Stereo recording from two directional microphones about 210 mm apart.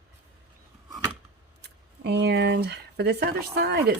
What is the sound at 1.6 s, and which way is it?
Speech, 55° right (ahead or behind).